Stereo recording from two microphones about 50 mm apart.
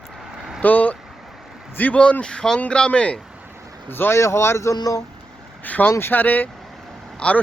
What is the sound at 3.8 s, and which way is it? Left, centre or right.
Speech, left.